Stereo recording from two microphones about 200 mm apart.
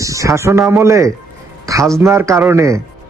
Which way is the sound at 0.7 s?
15° right (ahead or behind).